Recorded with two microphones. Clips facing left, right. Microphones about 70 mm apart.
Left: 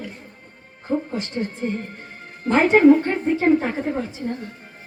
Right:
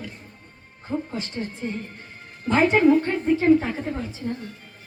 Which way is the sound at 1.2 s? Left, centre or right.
Left.